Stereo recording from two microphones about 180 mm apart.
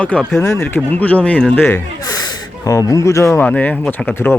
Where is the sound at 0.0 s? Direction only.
5° left (ahead or behind).